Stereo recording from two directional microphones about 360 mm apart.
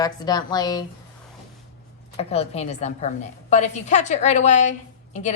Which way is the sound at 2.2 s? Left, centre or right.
Centre.